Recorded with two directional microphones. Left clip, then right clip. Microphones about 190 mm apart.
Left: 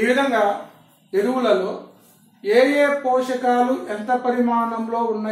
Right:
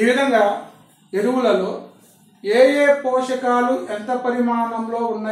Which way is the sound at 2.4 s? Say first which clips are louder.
Right 2 dB; centre (ahead or behind).